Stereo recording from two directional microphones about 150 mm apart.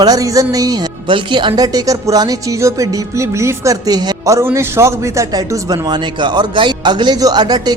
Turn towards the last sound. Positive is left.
turn(degrees=-25)  # may be behind; listen again after turning